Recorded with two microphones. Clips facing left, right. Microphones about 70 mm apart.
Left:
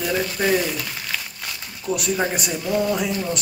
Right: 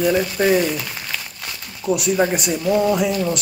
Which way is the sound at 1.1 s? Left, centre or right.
Centre.